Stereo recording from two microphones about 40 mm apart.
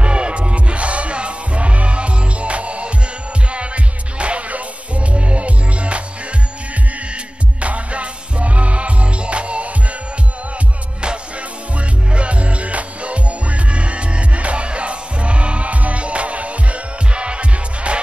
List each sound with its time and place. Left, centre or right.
0.0 s music: right
7.6 s music: right
12.1 s music: right